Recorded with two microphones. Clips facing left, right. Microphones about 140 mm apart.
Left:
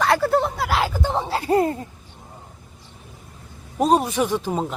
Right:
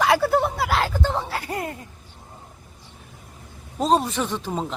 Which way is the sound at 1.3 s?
25° left (ahead or behind).